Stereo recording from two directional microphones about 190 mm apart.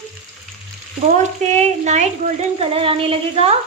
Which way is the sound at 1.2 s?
35° right (ahead or behind).